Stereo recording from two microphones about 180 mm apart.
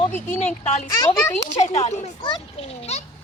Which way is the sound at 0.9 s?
20° left (ahead or behind).